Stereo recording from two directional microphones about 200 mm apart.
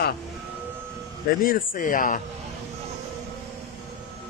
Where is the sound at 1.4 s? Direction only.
45° left (ahead or behind).